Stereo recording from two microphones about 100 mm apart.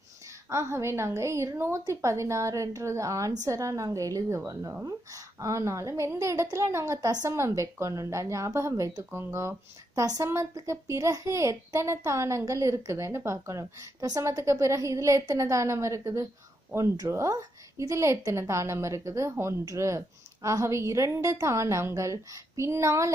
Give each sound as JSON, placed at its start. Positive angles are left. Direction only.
{"t": 0.5, "sound": "a woman's voice", "side_deg": -25}